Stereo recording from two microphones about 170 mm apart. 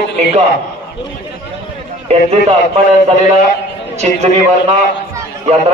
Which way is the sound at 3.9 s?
40° right (ahead or behind).